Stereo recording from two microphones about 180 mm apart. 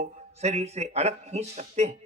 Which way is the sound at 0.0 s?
40° right (ahead or behind).